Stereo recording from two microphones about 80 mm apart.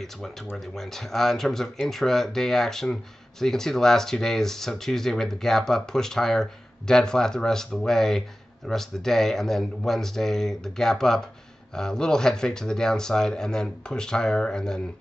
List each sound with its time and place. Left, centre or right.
0.0 s speech: centre